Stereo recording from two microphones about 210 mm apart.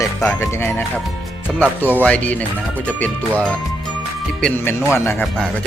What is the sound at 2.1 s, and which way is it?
Speech, 5° left (ahead or behind).